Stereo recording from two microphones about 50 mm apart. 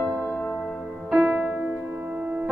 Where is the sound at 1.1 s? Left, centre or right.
Centre.